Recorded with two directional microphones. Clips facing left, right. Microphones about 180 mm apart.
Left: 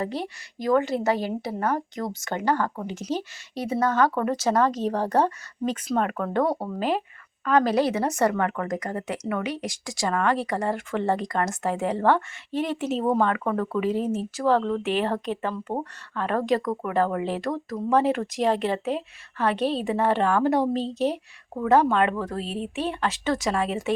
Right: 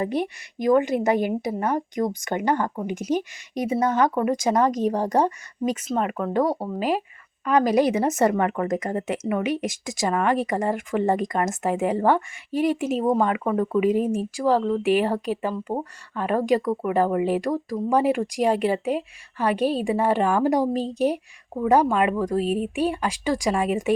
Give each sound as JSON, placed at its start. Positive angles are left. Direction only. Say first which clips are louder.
{"t": 0.0, "sound": "a woman's voice", "louder": "right 4 dB", "side_deg": -20}